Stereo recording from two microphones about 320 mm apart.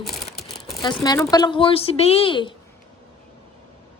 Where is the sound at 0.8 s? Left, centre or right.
Centre.